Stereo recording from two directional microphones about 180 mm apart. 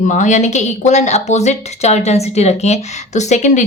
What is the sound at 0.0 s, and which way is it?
Speech, 45° left (ahead or behind).